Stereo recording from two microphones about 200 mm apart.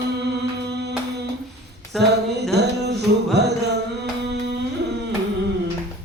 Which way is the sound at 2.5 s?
55° right (ahead or behind).